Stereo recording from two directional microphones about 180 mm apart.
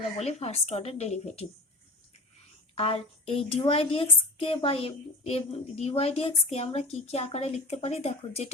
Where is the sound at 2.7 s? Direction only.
30° left (ahead or behind).